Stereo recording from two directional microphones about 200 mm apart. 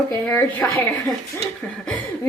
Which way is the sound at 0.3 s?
10° left (ahead or behind).